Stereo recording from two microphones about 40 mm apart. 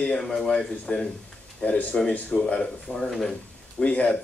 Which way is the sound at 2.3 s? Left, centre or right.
Left.